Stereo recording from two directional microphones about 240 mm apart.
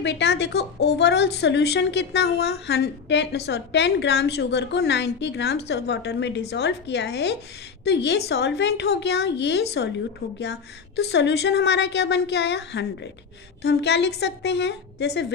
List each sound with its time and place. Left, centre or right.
0.0 s a woman's voice: left